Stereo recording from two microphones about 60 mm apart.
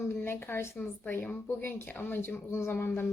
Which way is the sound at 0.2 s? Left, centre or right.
Left.